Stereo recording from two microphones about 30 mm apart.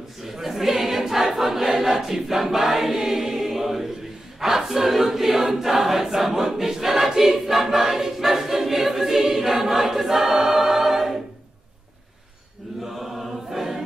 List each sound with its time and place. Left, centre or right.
0.2 s choir: centre
12.8 s chant: centre